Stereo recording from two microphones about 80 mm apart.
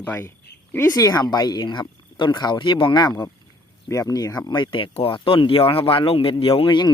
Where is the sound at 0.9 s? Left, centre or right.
Left.